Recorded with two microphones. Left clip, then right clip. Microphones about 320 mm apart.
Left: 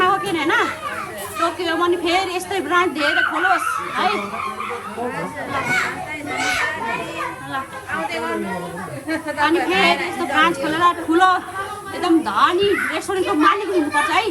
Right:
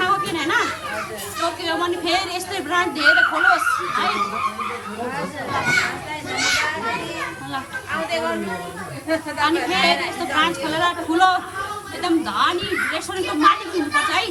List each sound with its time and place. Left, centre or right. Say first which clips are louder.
0.0 s a sound: left 2 dB; centre
1.4 s a woman's voice: left 3 dB; centre
9.0 s a woman's voice: left 1 dB; centre